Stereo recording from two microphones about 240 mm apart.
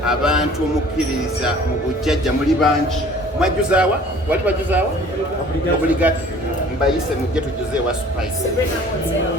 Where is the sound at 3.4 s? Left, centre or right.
Centre.